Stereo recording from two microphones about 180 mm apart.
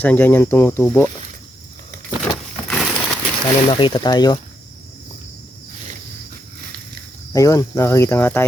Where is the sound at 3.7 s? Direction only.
25° left (ahead or behind).